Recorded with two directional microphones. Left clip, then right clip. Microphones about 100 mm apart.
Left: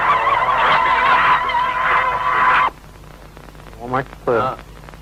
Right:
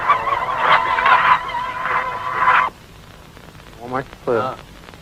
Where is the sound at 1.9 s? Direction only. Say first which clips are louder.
Left 3 dB; 35° left (ahead or behind).